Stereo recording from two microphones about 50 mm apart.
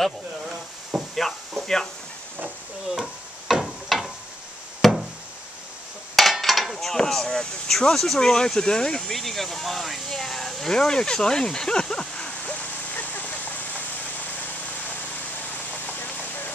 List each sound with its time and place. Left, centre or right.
0.9 s a sound: centre
2.9 s a sound: centre
4.8 s chop: centre
6.1 s speech: centre
12.9 s vehicle: left
15.5 s vehicle: left